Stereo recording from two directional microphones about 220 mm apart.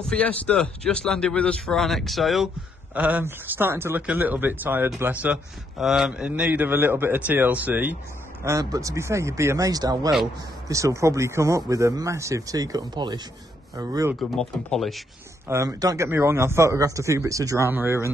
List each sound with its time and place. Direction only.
0.1 s speech: 5° left (ahead or behind); by 14.1 s 15° right (ahead or behind)
14.3 s speech: centre (ahead or behind)
15.4 s speech: 15° right (ahead or behind)